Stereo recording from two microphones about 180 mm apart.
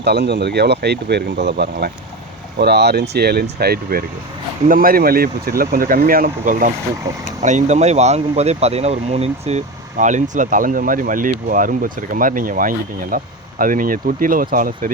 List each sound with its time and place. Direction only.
0.0 s speech: 65° right (ahead or behind); by 14.9 s 50° right (ahead or behind)